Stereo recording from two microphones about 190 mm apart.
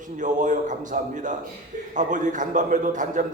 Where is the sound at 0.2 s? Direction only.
40° right (ahead or behind).